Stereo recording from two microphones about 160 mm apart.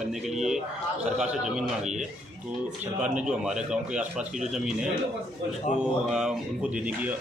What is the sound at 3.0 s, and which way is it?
Speech, 50° right (ahead or behind).